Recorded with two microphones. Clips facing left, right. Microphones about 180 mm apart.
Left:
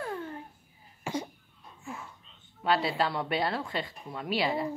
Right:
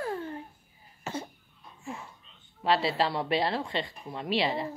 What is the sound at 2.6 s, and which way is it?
Speech, centre (ahead or behind).